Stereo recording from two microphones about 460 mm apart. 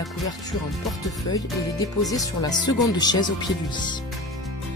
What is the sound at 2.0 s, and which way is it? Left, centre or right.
Speech, centre.